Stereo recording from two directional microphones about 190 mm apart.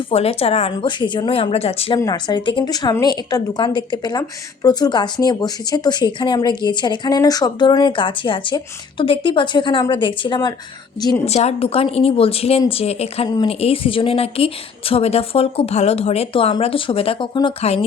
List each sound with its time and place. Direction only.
0.1 s a woman's voice: 30° left (ahead or behind)
2.0 s a woman's voice: 20° left (ahead or behind)
11.3 s a woman's voice: 35° left (ahead or behind)
13.2 s a woman's voice: 20° left (ahead or behind)